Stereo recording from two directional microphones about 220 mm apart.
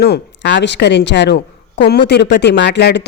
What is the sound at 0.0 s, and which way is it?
A woman's voice, 50° left (ahead or behind).